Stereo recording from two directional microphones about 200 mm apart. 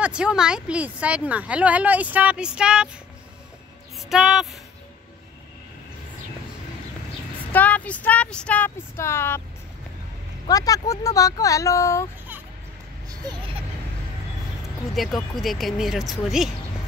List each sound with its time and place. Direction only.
0.0 s speech: 5° right (ahead or behind)
4.1 s speech: 5° right (ahead or behind)
7.5 s speech: 5° left (ahead or behind)
10.4 s speech: 20° left (ahead or behind)
13.1 s a sound: 20° right (ahead or behind)
15.0 s speech: centre (ahead or behind)